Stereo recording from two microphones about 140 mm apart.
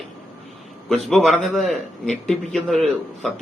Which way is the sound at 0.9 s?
Centre (ahead or behind).